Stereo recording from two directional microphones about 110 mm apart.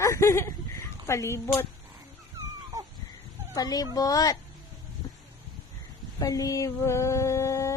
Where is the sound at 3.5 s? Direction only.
35° left (ahead or behind).